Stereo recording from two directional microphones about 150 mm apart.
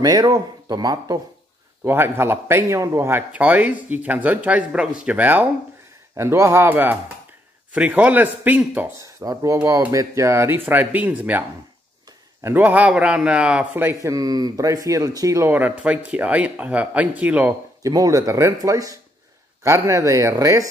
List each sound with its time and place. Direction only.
0.0 s a man's voice: 25° right (ahead or behind)
9.2 s a man's voice: 25° right (ahead or behind)
12.4 s a man's voice: 10° right (ahead or behind)
17.9 s speech: 25° right (ahead or behind)